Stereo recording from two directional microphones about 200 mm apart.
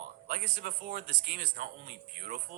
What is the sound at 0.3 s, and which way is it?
Speech, 50° right (ahead or behind).